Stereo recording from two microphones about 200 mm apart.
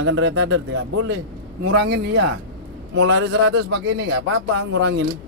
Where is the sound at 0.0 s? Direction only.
65° right (ahead or behind).